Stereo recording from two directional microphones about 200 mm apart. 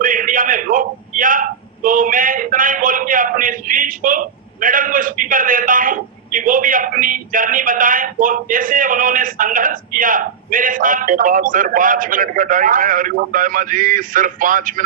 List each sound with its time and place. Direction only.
0.0 s a man's voice: 40° right (ahead or behind)